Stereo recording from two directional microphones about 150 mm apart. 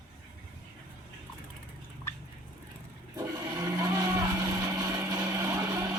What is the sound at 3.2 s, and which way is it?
Roar, 25° right (ahead or behind).